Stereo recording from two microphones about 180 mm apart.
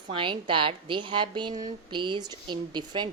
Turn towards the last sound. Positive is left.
turn(degrees=-25)  # may be behind; listen again after turning